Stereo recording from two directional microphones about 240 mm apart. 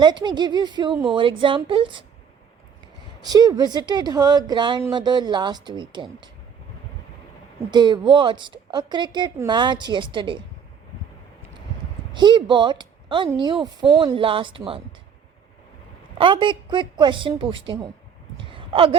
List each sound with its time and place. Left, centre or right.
0.0 s a woman's voice: centre
3.2 s a woman's voice: centre
7.7 s a woman's voice: centre
12.1 s a woman's voice: centre
16.1 s a woman's voice: right
18.3 s a sound: right